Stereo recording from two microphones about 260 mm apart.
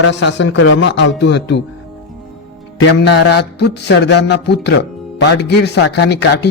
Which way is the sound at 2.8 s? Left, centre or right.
Left.